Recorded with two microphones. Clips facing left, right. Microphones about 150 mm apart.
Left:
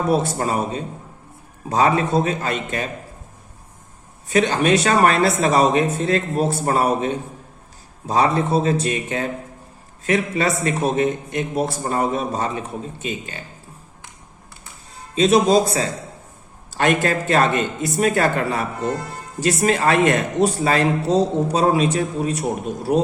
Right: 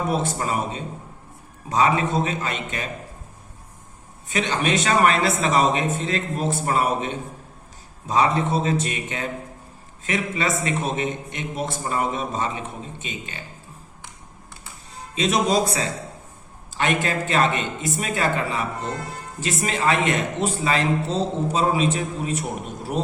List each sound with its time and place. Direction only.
0.1 s a man's voice: 40° left (ahead or behind)
4.3 s a man's voice: 40° left (ahead or behind)
15.1 s a man's voice: 35° left (ahead or behind)